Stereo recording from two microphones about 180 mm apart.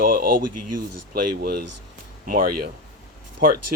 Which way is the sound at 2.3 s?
55° right (ahead or behind).